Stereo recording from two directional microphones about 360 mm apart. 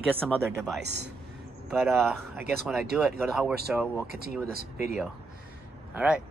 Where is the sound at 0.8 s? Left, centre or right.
Right.